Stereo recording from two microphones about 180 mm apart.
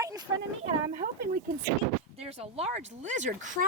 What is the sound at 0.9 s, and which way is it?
Speech, 50° right (ahead or behind).